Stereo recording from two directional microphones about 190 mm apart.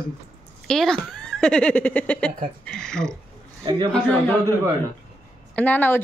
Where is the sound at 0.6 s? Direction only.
Centre (ahead or behind).